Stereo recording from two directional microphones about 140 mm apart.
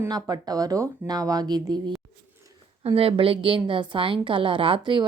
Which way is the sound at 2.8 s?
40° right (ahead or behind).